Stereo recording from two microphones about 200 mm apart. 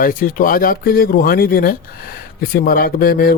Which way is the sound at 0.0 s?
45° left (ahead or behind).